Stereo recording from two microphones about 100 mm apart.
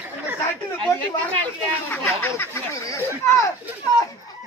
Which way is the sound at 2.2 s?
25° left (ahead or behind).